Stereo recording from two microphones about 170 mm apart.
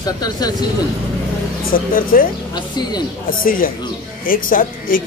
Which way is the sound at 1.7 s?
55° left (ahead or behind).